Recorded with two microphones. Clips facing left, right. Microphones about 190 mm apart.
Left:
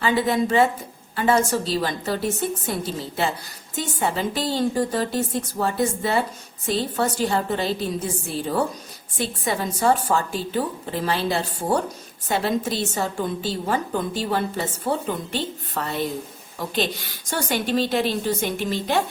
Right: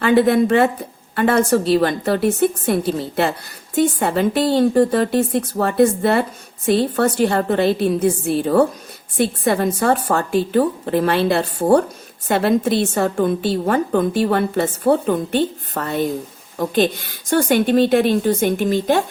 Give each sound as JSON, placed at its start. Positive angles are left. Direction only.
{"t": 0.0, "sound": "a woman's voice", "side_deg": -60}